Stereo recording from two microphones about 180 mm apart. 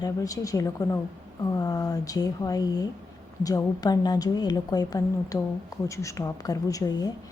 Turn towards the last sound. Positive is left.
turn(degrees=20)  # may be behind; listen again after turning